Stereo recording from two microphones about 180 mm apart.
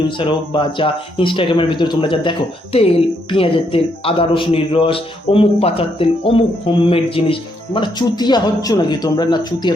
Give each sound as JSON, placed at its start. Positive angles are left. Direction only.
{"t": 0.2, "sound": "speech", "side_deg": 30}